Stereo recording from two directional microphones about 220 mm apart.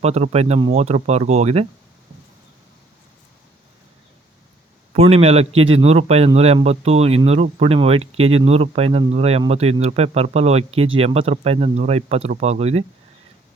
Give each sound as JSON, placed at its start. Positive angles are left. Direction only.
{"t": 0.0, "sound": "a man's voice", "side_deg": -30}
{"t": 4.9, "sound": "a man's voice", "side_deg": -30}